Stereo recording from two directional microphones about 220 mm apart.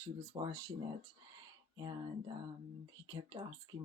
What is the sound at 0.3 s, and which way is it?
Speech, 20° right (ahead or behind).